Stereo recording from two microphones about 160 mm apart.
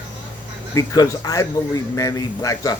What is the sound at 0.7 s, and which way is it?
A man's voice, 20° left (ahead or behind).